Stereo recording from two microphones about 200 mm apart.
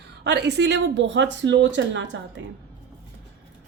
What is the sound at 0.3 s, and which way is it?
Speech, 60° right (ahead or behind).